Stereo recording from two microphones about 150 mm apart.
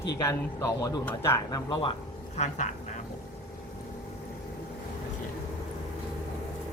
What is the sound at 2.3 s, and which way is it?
Speech, 50° left (ahead or behind).